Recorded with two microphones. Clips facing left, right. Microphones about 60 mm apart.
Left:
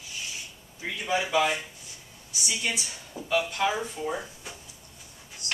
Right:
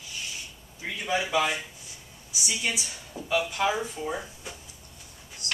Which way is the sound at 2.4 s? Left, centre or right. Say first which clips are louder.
Even; centre.